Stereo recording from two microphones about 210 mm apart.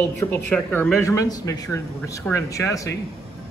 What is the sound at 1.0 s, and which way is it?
Speech, 15° left (ahead or behind).